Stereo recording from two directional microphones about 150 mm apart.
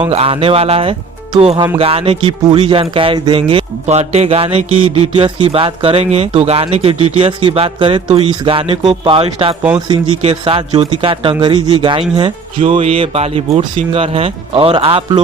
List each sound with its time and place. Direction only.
0.1 s speech: 40° right (ahead or behind)